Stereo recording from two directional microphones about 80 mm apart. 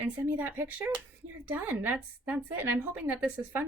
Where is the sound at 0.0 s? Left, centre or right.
Right.